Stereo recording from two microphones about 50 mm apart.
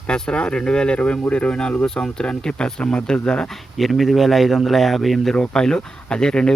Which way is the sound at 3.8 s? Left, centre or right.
Centre.